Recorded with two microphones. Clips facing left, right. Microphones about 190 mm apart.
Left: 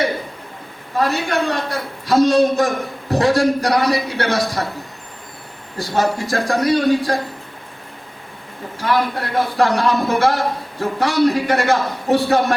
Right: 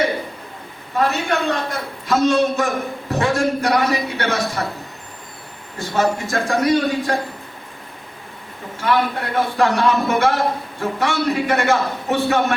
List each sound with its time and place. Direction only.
0.9 s a man's voice: 35° left (ahead or behind)
5.7 s a man's voice: 35° left (ahead or behind)
8.8 s a man's voice: 35° left (ahead or behind)